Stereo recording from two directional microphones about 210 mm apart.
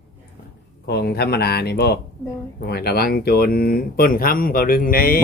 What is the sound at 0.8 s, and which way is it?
Speech, 50° left (ahead or behind).